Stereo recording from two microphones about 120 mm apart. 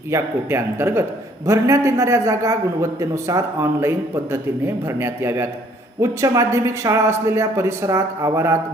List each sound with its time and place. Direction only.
0.1 s a man's voice: 20° right (ahead or behind)